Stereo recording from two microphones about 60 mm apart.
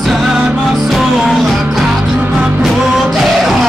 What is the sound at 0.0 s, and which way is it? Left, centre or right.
Music, centre.